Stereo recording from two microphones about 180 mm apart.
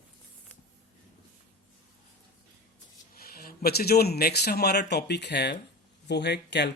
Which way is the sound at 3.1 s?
55° left (ahead or behind).